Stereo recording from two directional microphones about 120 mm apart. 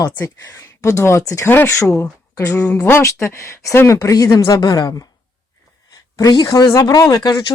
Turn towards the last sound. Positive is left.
turn(degrees=30)  # may be behind; listen again after turning